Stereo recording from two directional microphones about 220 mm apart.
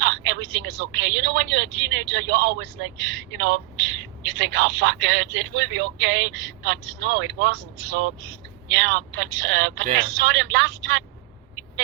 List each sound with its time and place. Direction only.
0.0 s a man's voice: 55° right (ahead or behind)
8.7 s a man's voice: 55° right (ahead or behind)